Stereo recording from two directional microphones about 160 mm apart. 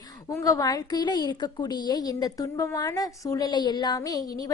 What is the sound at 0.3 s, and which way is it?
A woman's voice, 20° left (ahead or behind).